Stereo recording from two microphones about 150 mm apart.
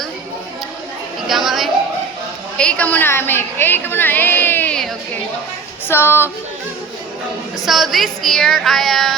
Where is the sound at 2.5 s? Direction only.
5° left (ahead or behind).